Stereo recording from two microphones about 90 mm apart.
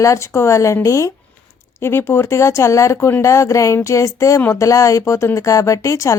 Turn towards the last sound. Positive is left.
turn(degrees=35)  # may be behind; listen again after turning